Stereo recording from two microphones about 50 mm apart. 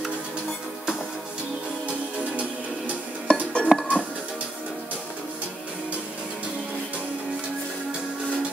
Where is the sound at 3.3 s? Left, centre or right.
Centre.